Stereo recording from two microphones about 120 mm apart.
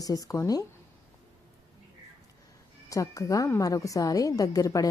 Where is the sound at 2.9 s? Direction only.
30° left (ahead or behind).